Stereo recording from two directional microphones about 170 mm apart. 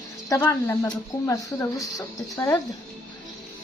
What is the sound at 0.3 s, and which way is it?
Speech, 15° left (ahead or behind).